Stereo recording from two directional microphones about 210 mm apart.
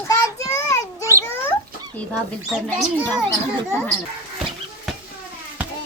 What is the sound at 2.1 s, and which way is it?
Speech, centre (ahead or behind).